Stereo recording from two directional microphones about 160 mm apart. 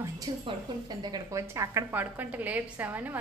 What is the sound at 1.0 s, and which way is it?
A woman's voice, 25° right (ahead or behind).